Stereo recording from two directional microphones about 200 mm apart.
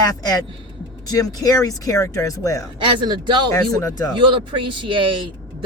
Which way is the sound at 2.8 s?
25° right (ahead or behind).